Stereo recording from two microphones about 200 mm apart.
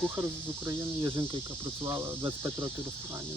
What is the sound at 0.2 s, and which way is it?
Speech, 15° right (ahead or behind).